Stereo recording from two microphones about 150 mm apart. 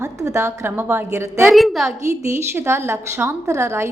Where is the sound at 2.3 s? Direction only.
15° right (ahead or behind).